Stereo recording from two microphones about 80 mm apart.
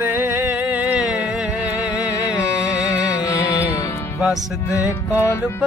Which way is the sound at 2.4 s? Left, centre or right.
Left.